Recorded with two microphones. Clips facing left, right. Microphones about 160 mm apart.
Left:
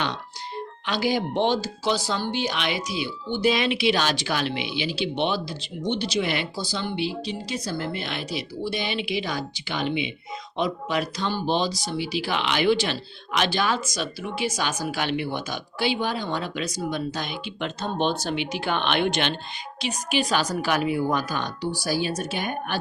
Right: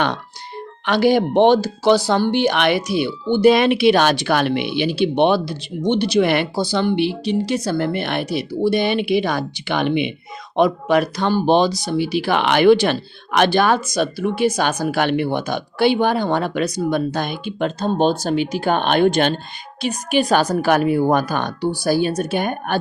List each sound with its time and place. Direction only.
0.9 s speech: 65° right (ahead or behind); by 19.3 s 45° right (ahead or behind)
19.8 s speech: 55° right (ahead or behind)